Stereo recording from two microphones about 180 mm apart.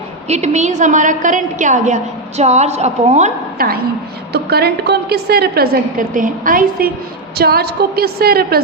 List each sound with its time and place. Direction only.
0.3 s a woman's voice: 40° right (ahead or behind)
4.3 s a woman's voice: 60° right (ahead or behind)